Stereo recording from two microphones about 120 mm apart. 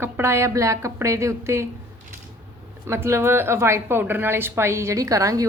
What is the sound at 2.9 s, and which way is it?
A woman's voice, 20° right (ahead or behind).